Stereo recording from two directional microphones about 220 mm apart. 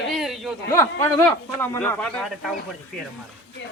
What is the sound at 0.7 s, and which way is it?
Speech, 10° left (ahead or behind).